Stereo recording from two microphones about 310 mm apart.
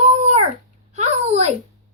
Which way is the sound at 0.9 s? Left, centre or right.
Right.